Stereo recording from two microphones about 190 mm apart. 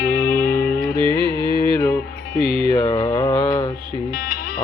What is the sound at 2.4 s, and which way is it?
Mantra, 50° left (ahead or behind).